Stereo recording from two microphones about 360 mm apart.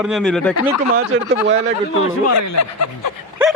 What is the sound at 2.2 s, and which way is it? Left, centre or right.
Speech, left.